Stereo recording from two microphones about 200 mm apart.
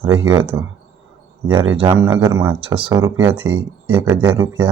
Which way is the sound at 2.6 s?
25° right (ahead or behind).